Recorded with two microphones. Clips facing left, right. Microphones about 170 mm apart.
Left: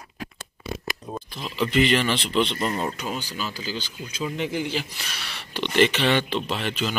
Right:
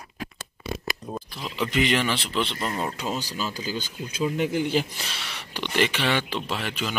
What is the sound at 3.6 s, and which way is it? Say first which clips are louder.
Speech: right 1 dB; 50° right (ahead or behind).